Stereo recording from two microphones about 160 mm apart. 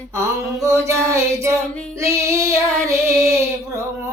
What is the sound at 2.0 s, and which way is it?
Child singing, 20° right (ahead or behind).